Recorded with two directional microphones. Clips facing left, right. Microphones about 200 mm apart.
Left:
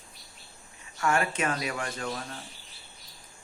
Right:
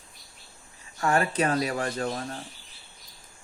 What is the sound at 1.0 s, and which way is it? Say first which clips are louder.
Speech: right 3 dB; 35° right (ahead or behind).